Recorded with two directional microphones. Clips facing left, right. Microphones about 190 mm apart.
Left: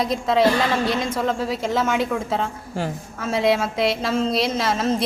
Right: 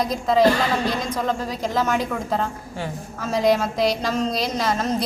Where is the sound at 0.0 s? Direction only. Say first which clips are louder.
Right 1 dB; centre (ahead or behind).